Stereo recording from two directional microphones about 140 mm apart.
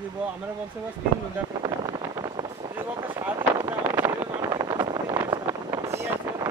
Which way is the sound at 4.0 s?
30° right (ahead or behind).